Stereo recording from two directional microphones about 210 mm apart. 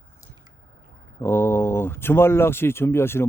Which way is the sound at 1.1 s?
10° left (ahead or behind).